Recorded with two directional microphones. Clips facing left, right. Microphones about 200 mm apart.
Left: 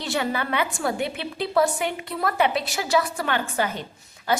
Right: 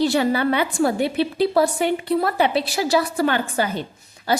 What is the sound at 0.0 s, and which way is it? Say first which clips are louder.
A woman's voice: right 8 dB; 35° right (ahead or behind).